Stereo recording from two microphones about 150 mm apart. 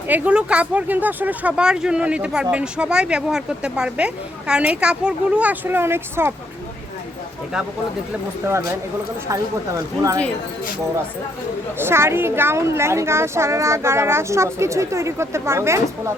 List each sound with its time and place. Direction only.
0.1 s speech: 10° right (ahead or behind)
9.3 s speech: 20° right (ahead or behind)
11.8 s speech: 15° right (ahead or behind)